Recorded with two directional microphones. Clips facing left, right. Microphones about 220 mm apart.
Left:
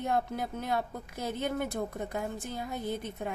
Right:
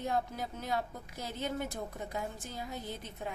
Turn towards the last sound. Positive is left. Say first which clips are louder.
# left 7 dB
turn(degrees=55)  # may be behind; listen again after turning